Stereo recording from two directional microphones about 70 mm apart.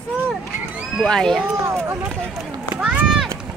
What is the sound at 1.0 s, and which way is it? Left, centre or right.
Speech, centre.